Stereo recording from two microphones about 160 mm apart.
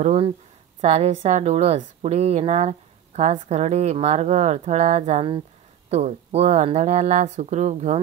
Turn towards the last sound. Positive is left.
turn(degrees=-45)  # may be behind; listen again after turning